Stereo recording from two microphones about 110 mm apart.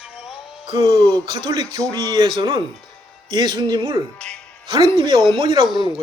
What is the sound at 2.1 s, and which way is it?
Speech, 45° right (ahead or behind).